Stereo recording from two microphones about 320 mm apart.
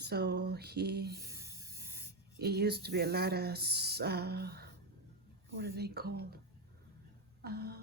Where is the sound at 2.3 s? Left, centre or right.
Right.